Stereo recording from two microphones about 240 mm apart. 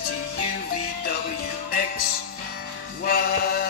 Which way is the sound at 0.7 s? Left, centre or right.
Left.